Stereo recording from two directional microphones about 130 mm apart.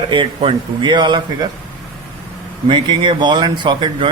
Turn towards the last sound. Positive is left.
turn(degrees=-35)  # may be behind; listen again after turning